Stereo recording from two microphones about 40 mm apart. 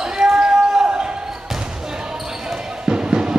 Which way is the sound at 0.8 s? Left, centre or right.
Right.